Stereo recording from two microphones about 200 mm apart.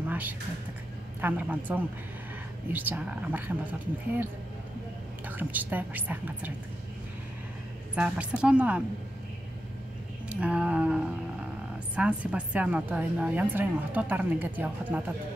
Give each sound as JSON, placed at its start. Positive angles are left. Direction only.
{"t": 0.1, "sound": "music", "side_deg": -10}
{"t": 1.2, "sound": "a woman's voice", "side_deg": -10}
{"t": 5.4, "sound": "a woman's voice", "side_deg": -10}
{"t": 7.9, "sound": "a woman's voice", "side_deg": -5}
{"t": 10.3, "sound": "a woman's voice", "side_deg": -5}